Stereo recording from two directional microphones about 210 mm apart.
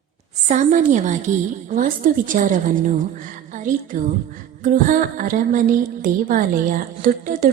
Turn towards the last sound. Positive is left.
turn(degrees=-40)  # may be behind; listen again after turning